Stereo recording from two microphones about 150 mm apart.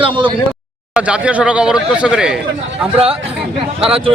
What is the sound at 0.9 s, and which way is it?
Speech, 5° right (ahead or behind).